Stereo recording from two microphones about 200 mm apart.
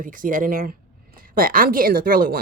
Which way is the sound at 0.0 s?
40° right (ahead or behind).